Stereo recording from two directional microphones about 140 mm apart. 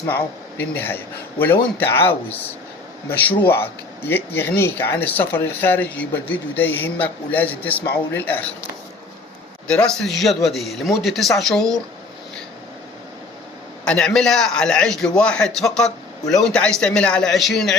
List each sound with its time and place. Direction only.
0.1 s speech: 15° left (ahead or behind)
9.6 s a man's voice: 5° left (ahead or behind)
13.8 s a man's voice: 5° left (ahead or behind)